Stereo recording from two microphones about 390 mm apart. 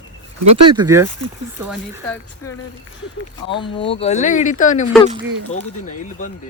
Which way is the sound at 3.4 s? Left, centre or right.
Centre.